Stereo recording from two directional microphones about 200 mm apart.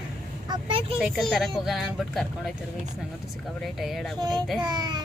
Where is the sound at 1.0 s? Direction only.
Centre (ahead or behind).